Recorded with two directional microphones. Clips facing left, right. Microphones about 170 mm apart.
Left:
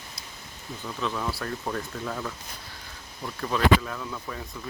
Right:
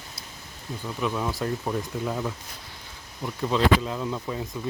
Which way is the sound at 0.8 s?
15° right (ahead or behind).